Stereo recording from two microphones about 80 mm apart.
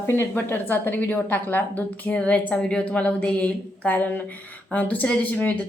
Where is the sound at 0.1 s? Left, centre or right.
Left.